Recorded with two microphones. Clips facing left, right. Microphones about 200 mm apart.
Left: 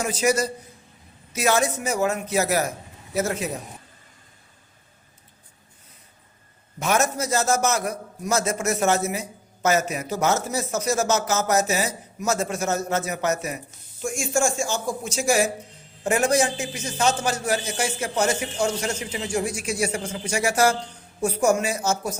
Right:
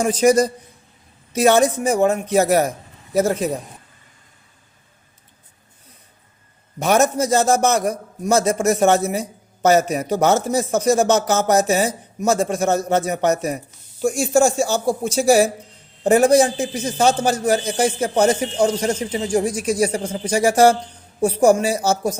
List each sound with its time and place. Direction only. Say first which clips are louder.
0.2 s a man's voice: right 7 dB; 35° right (ahead or behind)
6.7 s a man's voice: right 6 dB; 35° right (ahead or behind)